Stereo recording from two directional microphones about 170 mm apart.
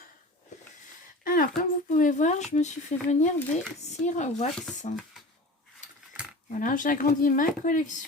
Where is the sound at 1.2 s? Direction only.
55° left (ahead or behind).